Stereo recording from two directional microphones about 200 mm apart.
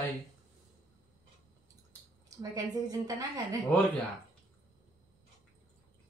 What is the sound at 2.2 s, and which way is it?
Speech, 15° right (ahead or behind).